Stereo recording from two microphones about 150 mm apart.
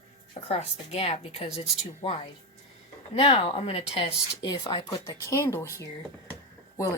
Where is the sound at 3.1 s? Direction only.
40° left (ahead or behind).